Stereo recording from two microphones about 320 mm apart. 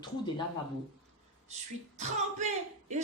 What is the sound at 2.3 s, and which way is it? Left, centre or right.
Speech, right.